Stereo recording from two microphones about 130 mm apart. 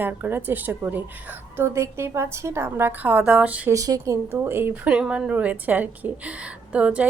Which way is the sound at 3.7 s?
25° right (ahead or behind).